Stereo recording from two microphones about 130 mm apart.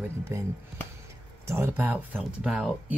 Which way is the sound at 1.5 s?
20° right (ahead or behind).